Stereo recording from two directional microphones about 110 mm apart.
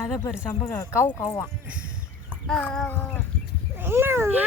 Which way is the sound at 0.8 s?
30° left (ahead or behind).